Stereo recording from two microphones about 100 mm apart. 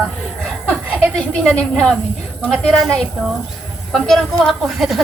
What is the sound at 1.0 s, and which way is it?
Speech, 5° left (ahead or behind).